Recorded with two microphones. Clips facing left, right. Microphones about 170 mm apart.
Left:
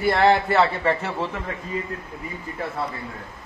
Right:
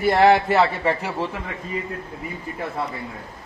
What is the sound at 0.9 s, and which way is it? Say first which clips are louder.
Speech: even; 5° right (ahead or behind).